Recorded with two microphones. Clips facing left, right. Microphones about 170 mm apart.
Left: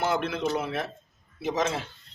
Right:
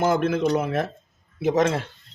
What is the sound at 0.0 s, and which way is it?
A man's voice, 45° right (ahead or behind).